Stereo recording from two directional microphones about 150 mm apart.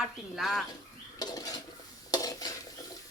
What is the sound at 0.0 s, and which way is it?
Speech, centre (ahead or behind).